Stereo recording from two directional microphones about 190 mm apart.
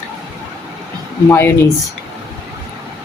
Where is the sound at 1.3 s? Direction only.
10° left (ahead or behind).